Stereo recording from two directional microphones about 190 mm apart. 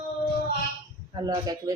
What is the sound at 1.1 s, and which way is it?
Speech, 20° right (ahead or behind).